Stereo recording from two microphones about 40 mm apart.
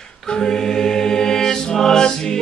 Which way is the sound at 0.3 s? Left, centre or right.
Centre.